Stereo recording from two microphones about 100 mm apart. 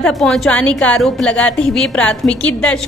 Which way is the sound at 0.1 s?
5° left (ahead or behind).